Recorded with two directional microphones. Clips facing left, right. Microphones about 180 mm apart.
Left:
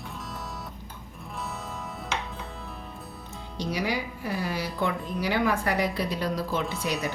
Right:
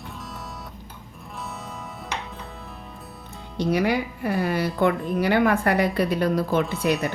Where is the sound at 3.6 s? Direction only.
55° right (ahead or behind).